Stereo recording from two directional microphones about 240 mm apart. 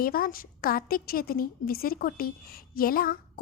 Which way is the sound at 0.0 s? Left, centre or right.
Left.